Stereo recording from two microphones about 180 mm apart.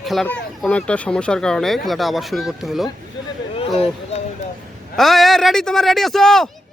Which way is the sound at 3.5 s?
30° left (ahead or behind).